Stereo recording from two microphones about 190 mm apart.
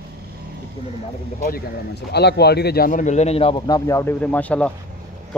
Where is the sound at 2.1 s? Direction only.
60° left (ahead or behind); by 4.7 s 5° left (ahead or behind).